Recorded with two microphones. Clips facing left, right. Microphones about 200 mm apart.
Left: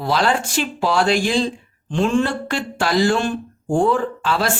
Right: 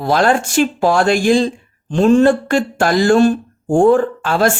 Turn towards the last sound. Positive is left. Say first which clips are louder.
# right 6 dB
turn(degrees=-50)  # may be behind; listen again after turning